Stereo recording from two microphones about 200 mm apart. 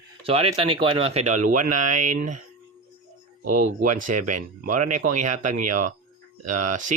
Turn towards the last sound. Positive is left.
turn(degrees=-40)  # may be behind; listen again after turning